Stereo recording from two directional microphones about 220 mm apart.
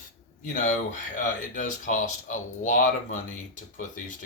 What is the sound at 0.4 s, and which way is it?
Speech, 35° left (ahead or behind).